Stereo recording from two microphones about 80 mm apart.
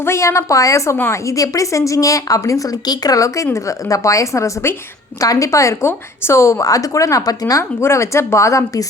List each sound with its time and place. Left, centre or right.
0.0 s a woman's voice: left
0.9 s a woman's voice: left
1.3 s a woman's voice: left
7.9 s a woman's voice: left